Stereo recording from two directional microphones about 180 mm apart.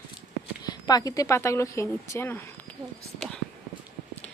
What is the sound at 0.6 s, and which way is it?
Speech, 20° left (ahead or behind).